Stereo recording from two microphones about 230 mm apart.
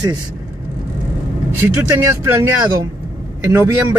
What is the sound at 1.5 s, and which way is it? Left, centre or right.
Speech, centre.